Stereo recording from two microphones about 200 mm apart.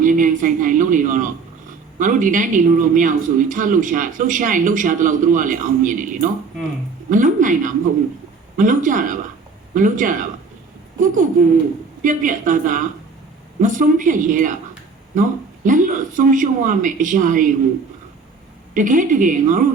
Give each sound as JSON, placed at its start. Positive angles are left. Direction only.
{"t": 0.0, "sound": "a woman's voice", "side_deg": -40}
{"t": 18.7, "sound": "speech", "side_deg": -40}